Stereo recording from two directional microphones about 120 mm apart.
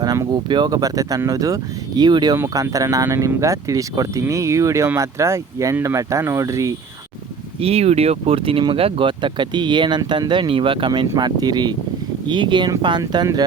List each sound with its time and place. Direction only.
0.0 s speech: 35° right (ahead or behind)
7.6 s speech: 60° right (ahead or behind); by 13.2 s 35° right (ahead or behind)